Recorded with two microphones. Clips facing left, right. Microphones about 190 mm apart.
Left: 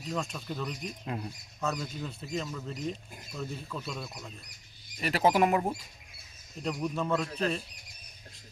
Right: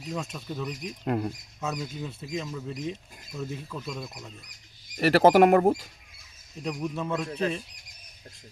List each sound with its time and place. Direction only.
0.1 s speech: 5° right (ahead or behind)
1.0 s speech: 55° right (ahead or behind)
1.6 s speech: 5° right (ahead or behind)
3.3 s speech: centre (ahead or behind)
4.9 s speech: 70° right (ahead or behind)
6.7 s speech: 5° right (ahead or behind)